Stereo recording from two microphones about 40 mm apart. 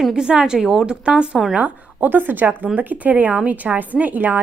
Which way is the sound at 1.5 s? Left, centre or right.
Right.